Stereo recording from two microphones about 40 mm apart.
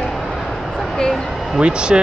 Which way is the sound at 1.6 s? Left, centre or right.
Right.